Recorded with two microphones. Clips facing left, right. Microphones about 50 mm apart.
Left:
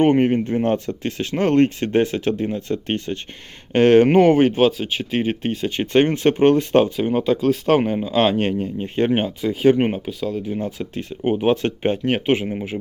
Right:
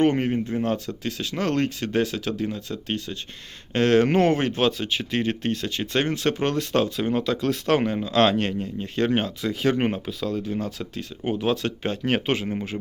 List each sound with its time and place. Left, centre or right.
0.0 s speech: left
0.3 s speech: left
4.6 s speech: centre
5.7 s speech: left
6.9 s speech: centre
8.4 s speech: left
9.7 s speech: centre
10.4 s speech: centre
12.0 s speech: centre